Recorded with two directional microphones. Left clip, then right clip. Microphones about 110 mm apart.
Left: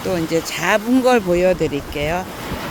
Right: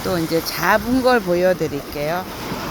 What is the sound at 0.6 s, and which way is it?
Speech, 65° left (ahead or behind).